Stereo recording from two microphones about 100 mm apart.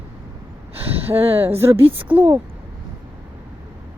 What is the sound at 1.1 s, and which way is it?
Speech, 75° right (ahead or behind).